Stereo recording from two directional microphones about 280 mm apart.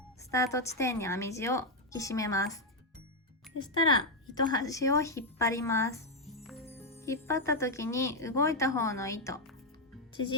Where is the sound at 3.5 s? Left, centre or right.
Centre.